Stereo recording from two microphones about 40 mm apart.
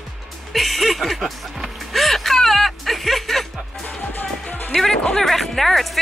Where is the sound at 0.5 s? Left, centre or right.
Centre.